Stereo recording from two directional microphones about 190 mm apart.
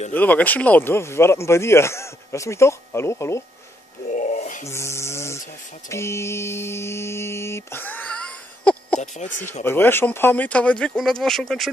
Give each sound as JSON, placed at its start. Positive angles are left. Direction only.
{"t": 0.1, "sound": "speech", "side_deg": 10}
{"t": 4.1, "sound": "a sound", "side_deg": 40}
{"t": 4.6, "sound": "a sound", "side_deg": 15}
{"t": 5.9, "sound": "speech", "side_deg": 15}
{"t": 9.0, "sound": "speech", "side_deg": 40}
{"t": 9.6, "sound": "speech", "side_deg": 10}